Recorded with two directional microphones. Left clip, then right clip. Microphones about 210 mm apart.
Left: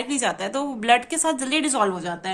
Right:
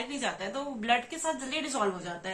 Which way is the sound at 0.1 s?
50° left (ahead or behind).